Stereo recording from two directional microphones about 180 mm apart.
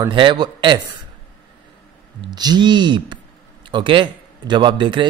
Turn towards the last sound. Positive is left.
turn(degrees=-25)  # may be behind; listen again after turning